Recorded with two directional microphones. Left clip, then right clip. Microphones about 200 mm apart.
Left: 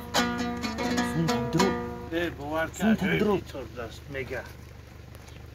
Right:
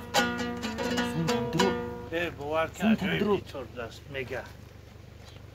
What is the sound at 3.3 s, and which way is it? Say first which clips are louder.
Speech: left 1 dB; centre (ahead or behind).